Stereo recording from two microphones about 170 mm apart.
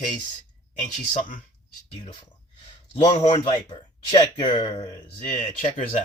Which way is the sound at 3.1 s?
30° left (ahead or behind).